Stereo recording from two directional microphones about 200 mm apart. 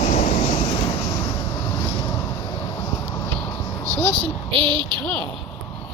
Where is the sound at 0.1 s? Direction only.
35° left (ahead or behind).